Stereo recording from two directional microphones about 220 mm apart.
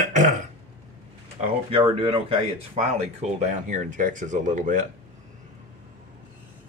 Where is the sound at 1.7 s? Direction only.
25° right (ahead or behind).